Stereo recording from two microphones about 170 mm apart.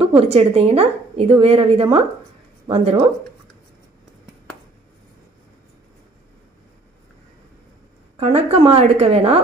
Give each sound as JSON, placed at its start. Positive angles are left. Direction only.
{"t": 0.3, "sound": "a woman's voice", "side_deg": -35}
{"t": 8.2, "sound": "a woman's voice", "side_deg": -40}